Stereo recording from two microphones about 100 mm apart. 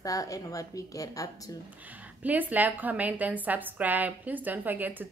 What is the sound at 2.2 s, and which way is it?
A woman's voice, 15° right (ahead or behind).